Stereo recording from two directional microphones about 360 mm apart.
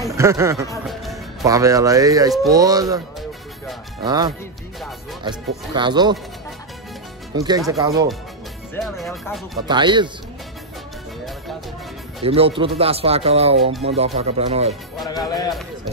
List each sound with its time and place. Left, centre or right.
0.1 s speech: centre
5.8 s speech: centre
7.3 s speech: centre
8.7 s speech: centre
9.7 s speech: centre
12.2 s speech: centre
15.0 s speech: centre